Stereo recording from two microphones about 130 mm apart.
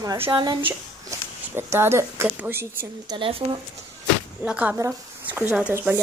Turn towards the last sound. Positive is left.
turn(degrees=-10)  # may be behind; listen again after turning